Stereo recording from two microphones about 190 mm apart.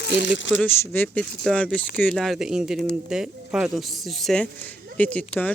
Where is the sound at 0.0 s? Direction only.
70° left (ahead or behind).